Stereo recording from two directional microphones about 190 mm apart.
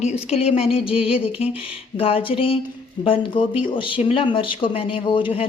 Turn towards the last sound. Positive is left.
turn(degrees=30)  # may be behind; listen again after turning